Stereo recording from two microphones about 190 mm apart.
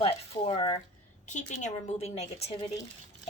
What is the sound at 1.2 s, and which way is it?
A woman's voice, 40° left (ahead or behind).